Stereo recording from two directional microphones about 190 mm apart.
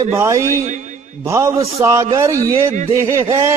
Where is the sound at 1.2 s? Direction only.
15° right (ahead or behind).